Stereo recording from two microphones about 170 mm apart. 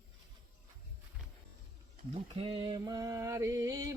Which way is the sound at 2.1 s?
30° right (ahead or behind).